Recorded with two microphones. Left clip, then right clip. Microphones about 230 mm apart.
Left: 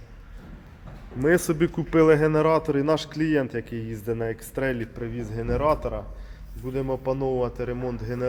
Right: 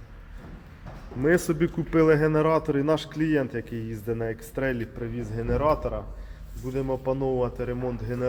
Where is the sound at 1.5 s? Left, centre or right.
Left.